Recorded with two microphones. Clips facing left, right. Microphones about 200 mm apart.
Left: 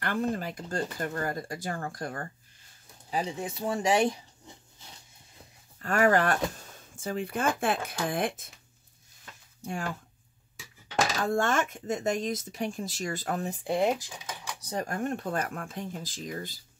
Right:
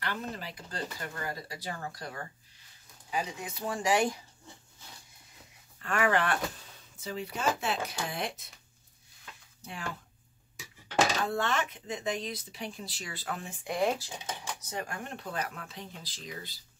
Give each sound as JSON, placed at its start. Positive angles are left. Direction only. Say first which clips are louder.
{"t": 0.0, "sound": "speech", "louder": "left 8 dB", "side_deg": 50}
{"t": 3.1, "sound": "speech", "louder": "left 4 dB", "side_deg": 30}
{"t": 5.8, "sound": "speech", "louder": "left 5 dB", "side_deg": 40}
{"t": 11.2, "sound": "speech", "louder": "left 4 dB", "side_deg": 45}
{"t": 13.7, "sound": "speech", "louder": "left 2 dB", "side_deg": 20}
{"t": 14.0, "sound": "speech", "louder": "right 1 dB", "side_deg": -30}
{"t": 14.6, "sound": "speech", "louder": "left 7 dB", "side_deg": 40}